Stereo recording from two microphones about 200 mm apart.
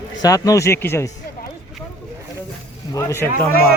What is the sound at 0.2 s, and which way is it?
Speech, 15° left (ahead or behind).